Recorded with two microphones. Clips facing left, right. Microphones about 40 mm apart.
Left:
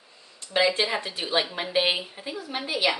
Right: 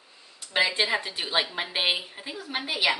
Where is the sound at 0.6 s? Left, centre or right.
Centre.